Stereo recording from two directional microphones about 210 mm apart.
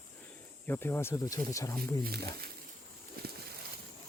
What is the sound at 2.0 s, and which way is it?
Speech, 45° right (ahead or behind).